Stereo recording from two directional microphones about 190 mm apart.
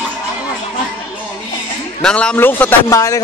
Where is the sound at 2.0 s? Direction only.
5° left (ahead or behind).